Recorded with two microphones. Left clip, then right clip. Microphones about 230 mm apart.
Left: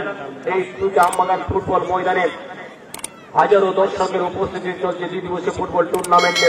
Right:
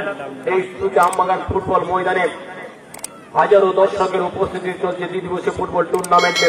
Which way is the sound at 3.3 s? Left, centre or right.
Right.